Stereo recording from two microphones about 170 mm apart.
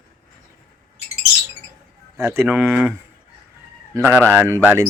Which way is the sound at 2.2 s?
15° right (ahead or behind).